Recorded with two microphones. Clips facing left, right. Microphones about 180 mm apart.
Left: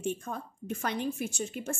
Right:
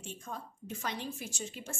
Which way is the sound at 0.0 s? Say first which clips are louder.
Left 9 dB; 60° left (ahead or behind).